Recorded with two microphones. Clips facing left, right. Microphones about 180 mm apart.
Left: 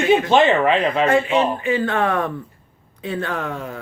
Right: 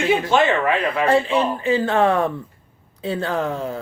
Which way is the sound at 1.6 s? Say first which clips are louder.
Right 2 dB; 30° right (ahead or behind).